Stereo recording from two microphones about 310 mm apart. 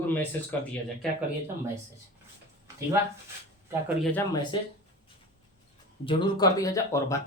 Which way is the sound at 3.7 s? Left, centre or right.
Centre.